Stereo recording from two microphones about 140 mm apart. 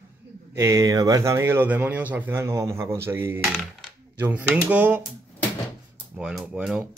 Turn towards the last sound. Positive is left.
turn(degrees=-5)  # may be behind; listen again after turning